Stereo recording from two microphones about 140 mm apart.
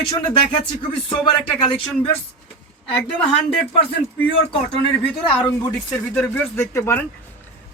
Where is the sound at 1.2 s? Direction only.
40° left (ahead or behind).